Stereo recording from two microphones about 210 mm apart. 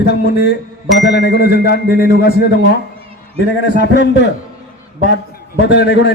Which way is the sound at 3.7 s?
55° left (ahead or behind).